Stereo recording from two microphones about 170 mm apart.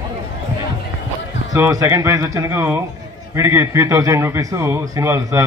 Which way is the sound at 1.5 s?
20° right (ahead or behind).